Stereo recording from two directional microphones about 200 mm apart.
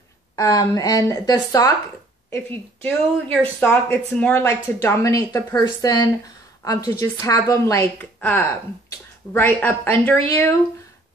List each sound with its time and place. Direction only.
0.4 s a woman's voice: 15° left (ahead or behind)